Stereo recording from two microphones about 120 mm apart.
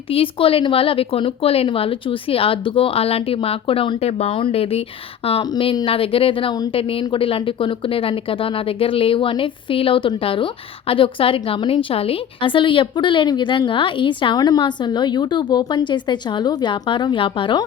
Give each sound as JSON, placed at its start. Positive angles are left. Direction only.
{"t": 0.1, "sound": "speech", "side_deg": 50}